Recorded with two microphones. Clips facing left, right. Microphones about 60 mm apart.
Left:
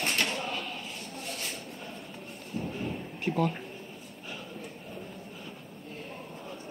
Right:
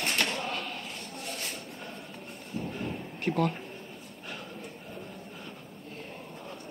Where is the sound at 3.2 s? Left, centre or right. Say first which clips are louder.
Right 1 dB; right.